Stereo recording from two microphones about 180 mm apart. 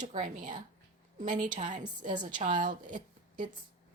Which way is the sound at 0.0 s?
45° right (ahead or behind).